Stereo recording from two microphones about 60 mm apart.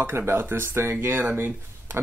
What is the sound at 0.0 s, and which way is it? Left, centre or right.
Speech, right.